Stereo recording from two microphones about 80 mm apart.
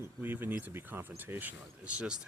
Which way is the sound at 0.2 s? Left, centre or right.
Right.